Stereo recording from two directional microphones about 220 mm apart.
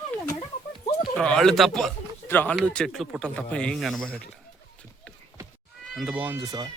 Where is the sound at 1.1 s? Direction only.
5° left (ahead or behind).